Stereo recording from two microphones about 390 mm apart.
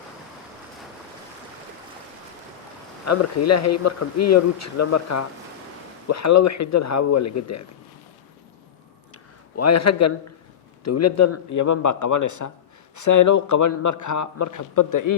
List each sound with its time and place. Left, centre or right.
3.1 s a man's voice: left
9.1 s a sound: left
10.8 s a man's voice: left